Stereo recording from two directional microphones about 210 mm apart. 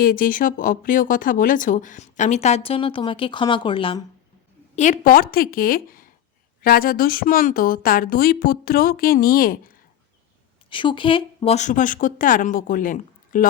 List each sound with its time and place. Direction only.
0.0 s speech: 40° left (ahead or behind); by 4.0 s 25° left (ahead or behind)
4.7 s speech: 35° left (ahead or behind)
10.7 s speech: 25° left (ahead or behind); by 13.5 s 40° left (ahead or behind)